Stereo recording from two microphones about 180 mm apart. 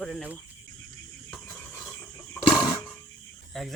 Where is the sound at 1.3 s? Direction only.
10° left (ahead or behind).